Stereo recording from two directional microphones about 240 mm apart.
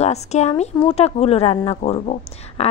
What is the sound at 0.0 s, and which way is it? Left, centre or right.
A woman's voice, left.